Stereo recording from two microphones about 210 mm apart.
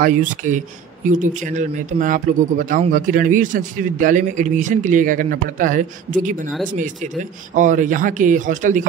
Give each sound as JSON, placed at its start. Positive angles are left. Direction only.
{"t": 0.0, "sound": "speech", "side_deg": -40}